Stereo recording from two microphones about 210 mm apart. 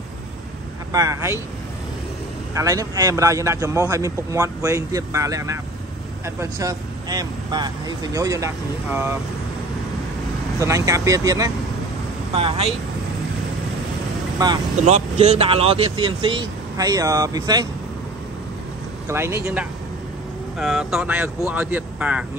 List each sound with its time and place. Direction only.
0.9 s a man's voice: 15° right (ahead or behind)
2.5 s a man's voice: 15° right (ahead or behind)
10.6 s a man's voice: 15° right (ahead or behind)
14.4 s a man's voice: 20° right (ahead or behind)
14.8 s a man's voice: 30° right (ahead or behind)
19.0 s a man's voice: 10° right (ahead or behind)